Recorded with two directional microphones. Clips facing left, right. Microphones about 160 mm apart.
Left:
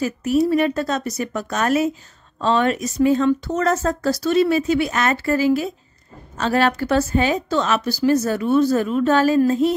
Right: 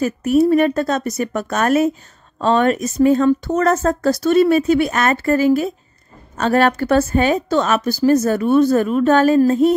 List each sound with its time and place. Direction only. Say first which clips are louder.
0.0 s a woman's voice: right 4 dB; 55° right (ahead or behind)